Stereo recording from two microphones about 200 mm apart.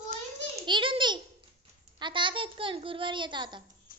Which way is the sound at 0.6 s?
25° right (ahead or behind).